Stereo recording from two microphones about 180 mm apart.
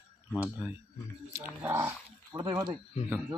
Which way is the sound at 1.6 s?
10° right (ahead or behind).